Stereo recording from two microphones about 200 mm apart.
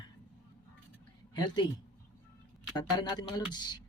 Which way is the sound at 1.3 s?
20° left (ahead or behind).